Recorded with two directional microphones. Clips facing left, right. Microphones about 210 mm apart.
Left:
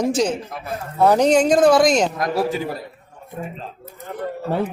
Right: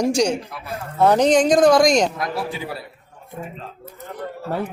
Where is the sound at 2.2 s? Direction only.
45° left (ahead or behind).